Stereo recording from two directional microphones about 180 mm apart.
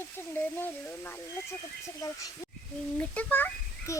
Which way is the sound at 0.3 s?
10° left (ahead or behind).